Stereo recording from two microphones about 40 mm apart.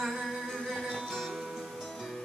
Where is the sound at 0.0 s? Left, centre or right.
Centre.